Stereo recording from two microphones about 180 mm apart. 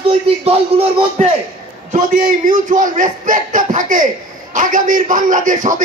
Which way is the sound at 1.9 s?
50° right (ahead or behind).